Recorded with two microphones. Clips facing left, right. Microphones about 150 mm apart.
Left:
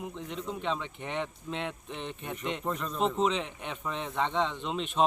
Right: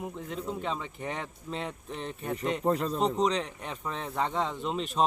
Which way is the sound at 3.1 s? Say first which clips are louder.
Right 1 dB; centre (ahead or behind).